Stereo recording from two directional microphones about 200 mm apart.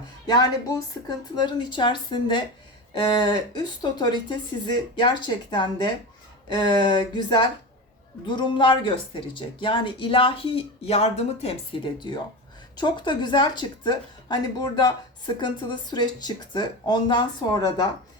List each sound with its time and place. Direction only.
0.3 s speech: 20° left (ahead or behind)